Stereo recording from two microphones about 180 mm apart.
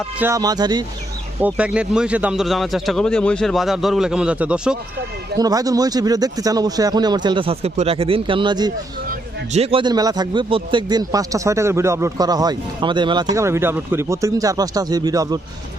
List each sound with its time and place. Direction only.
0.2 s speech: 15° right (ahead or behind)
1.4 s a man's voice: 10° right (ahead or behind)
5.4 s speech: 20° right (ahead or behind)
9.5 s speech: 35° right (ahead or behind)
13.3 s speech: 15° right (ahead or behind)